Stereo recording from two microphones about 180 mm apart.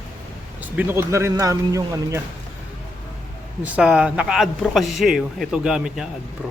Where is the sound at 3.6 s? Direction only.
5° right (ahead or behind).